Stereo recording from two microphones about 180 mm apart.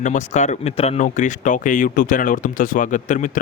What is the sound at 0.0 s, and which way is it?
Speech, 45° left (ahead or behind).